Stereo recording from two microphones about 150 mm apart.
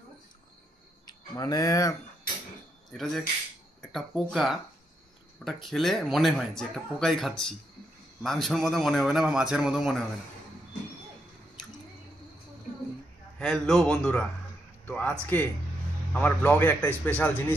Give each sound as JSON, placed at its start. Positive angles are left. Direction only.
{"t": 1.0, "sound": "speech", "side_deg": 25}
{"t": 2.9, "sound": "speech", "side_deg": 0}
{"t": 13.4, "sound": "a man's voice", "side_deg": 0}